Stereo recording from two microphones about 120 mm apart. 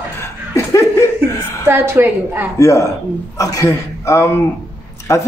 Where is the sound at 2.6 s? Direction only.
25° left (ahead or behind).